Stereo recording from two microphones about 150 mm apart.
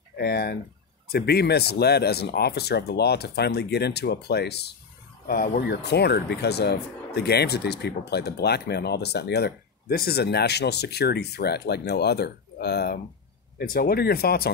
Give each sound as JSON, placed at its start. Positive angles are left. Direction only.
{"t": 0.2, "sound": "speech", "side_deg": 90}